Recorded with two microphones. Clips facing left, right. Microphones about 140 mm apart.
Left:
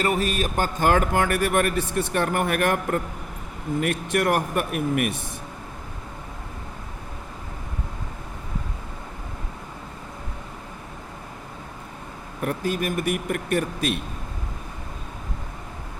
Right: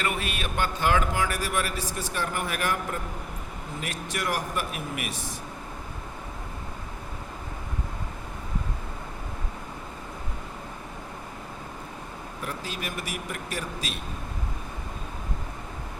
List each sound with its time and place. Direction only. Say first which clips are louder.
0.0 s a man's voice: left 7 dB; 40° left (ahead or behind); by 5.3 s 55° left (ahead or behind)
12.4 s speech: left 10 dB; 50° left (ahead or behind)